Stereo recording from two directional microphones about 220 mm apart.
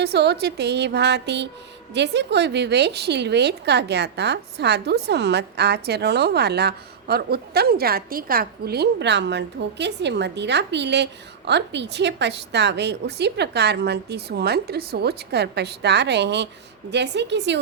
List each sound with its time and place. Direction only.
0.0 s a woman's voice: 50° right (ahead or behind)